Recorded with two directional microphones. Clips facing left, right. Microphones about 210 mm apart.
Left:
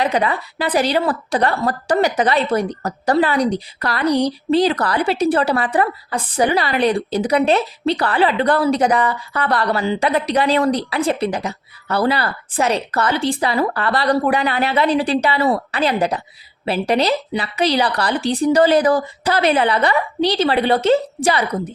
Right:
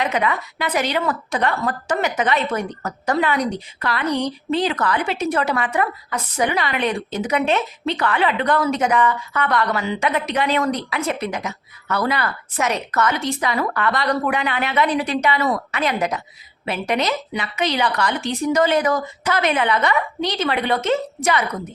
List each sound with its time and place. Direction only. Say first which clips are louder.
0.0 s a woman's voice: left 3 dB; 35° left (ahead or behind)